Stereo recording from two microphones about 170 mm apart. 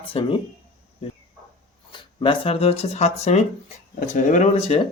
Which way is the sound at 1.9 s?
30° left (ahead or behind).